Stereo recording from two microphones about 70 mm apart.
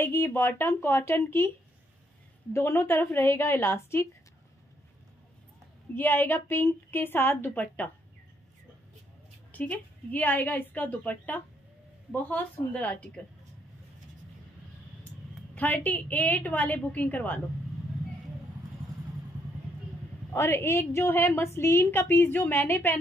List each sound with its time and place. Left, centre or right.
0.0 s a woman's voice: left
2.5 s a woman's voice: left
5.9 s a woman's voice: left
9.5 s a woman's voice: left
15.5 s a woman's voice: left
20.2 s a woman's voice: left